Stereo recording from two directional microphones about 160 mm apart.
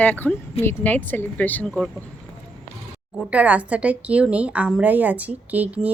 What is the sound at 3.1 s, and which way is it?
Speech, 10° right (ahead or behind).